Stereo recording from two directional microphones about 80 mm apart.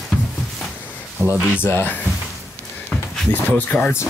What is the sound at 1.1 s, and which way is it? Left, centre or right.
Speech, right.